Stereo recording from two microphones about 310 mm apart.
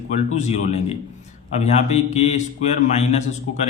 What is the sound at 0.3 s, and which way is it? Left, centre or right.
A man's voice, left.